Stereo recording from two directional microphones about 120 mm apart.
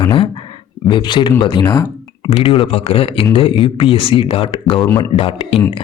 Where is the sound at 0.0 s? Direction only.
45° left (ahead or behind).